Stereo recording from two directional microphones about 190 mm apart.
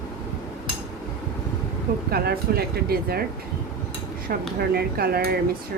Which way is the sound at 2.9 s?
55° right (ahead or behind).